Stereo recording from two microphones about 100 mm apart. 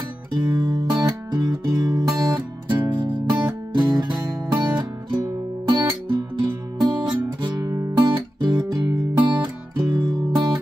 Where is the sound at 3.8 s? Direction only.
45° right (ahead or behind).